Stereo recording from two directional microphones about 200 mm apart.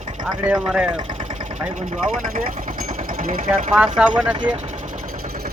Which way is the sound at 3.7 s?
Centre (ahead or behind).